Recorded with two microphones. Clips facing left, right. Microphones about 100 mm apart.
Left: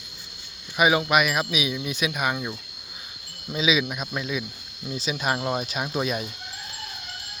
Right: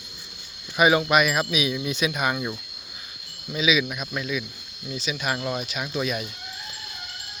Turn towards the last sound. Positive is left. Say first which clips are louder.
# left 1 dB
turn(degrees=30)  # may be behind; listen again after turning